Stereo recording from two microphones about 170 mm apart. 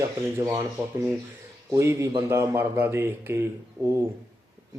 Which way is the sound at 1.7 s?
15° right (ahead or behind).